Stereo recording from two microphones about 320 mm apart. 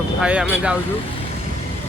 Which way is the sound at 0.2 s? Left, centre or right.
Centre.